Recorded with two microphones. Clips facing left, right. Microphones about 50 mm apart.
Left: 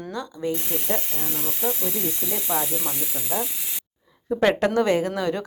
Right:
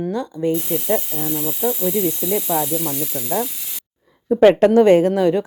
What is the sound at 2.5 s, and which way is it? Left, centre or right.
Sizzle, left.